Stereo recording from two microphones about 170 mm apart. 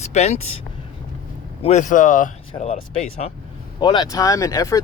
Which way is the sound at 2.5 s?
35° left (ahead or behind).